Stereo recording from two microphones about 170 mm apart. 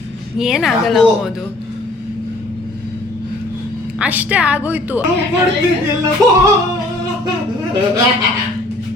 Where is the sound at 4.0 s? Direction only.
10° right (ahead or behind).